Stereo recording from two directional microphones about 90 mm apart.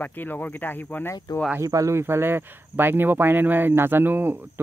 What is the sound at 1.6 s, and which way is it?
Speech, 35° right (ahead or behind).